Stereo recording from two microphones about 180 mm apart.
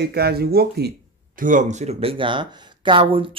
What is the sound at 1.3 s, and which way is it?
Speech, 45° right (ahead or behind).